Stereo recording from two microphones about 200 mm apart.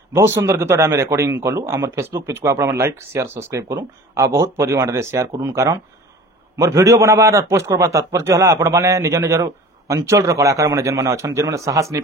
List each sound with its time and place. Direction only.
0.1 s speech: 15° right (ahead or behind)